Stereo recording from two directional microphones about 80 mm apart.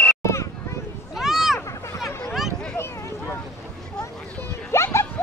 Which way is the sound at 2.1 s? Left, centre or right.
Left.